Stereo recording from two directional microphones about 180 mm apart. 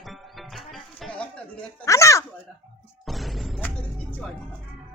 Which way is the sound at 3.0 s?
Centre (ahead or behind).